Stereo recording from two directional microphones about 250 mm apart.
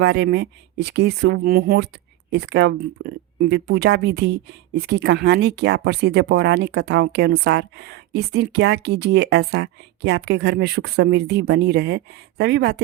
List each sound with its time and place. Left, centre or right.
0.0 s speech: right